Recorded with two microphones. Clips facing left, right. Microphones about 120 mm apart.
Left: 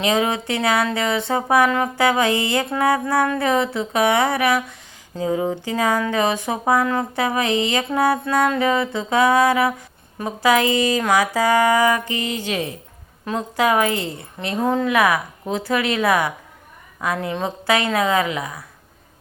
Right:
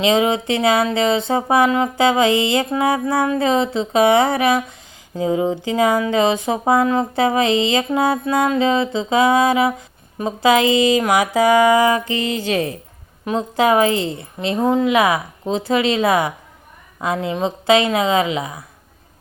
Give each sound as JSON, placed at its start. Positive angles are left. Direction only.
{"t": 0.0, "sound": "speech", "side_deg": -20}
{"t": 13.2, "sound": "speech", "side_deg": -25}